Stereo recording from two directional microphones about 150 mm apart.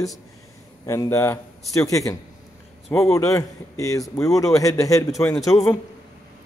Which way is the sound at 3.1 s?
20° left (ahead or behind).